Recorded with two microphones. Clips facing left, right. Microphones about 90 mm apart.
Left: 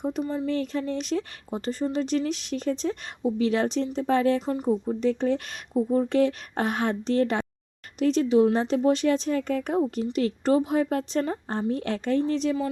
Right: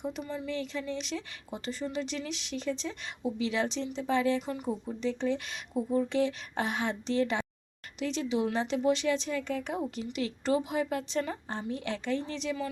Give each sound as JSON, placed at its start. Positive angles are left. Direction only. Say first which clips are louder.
{"t": 0.0, "sound": "speech", "louder": "left 8 dB", "side_deg": 40}